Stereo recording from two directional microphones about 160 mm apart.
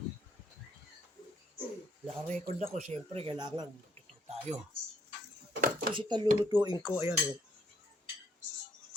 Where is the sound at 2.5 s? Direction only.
45° right (ahead or behind).